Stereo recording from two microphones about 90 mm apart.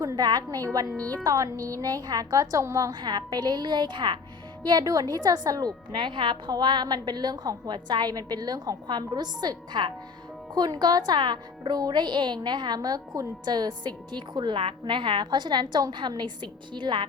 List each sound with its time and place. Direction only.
0.0 s a woman's voice: 45° right (ahead or behind)
0.9 s a woman's voice: 15° left (ahead or behind)
1.2 s a woman's voice: 40° right (ahead or behind)
2.9 s a woman's voice: 55° right (ahead or behind)
5.9 s a woman's voice: 60° right (ahead or behind)